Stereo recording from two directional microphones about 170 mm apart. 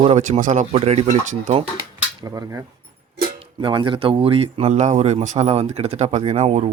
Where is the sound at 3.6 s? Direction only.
30° right (ahead or behind).